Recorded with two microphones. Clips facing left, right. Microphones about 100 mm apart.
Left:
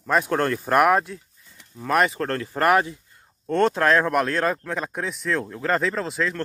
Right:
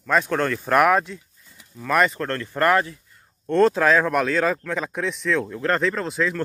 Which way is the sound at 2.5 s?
15° left (ahead or behind).